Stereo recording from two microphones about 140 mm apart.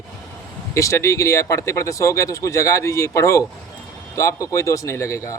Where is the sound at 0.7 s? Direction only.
20° left (ahead or behind).